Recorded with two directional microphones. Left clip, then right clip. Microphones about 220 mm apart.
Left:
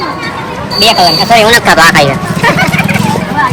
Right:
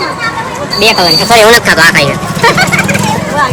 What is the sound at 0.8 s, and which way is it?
Speech, 35° right (ahead or behind).